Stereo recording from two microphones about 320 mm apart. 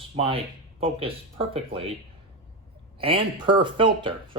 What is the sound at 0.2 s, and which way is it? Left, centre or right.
Speech, centre.